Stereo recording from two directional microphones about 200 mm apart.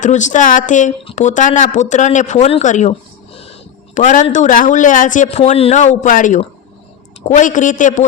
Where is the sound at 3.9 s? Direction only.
40° left (ahead or behind).